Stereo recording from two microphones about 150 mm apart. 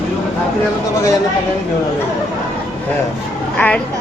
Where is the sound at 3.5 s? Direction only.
10° left (ahead or behind).